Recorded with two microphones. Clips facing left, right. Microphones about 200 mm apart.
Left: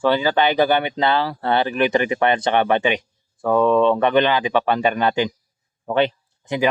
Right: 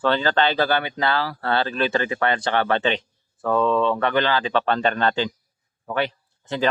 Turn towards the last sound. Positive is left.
turn(degrees=20)  # may be behind; listen again after turning